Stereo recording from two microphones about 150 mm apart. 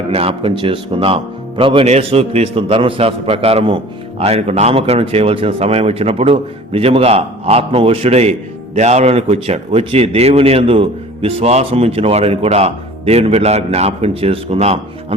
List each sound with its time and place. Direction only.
0.1 s speech: 40° right (ahead or behind)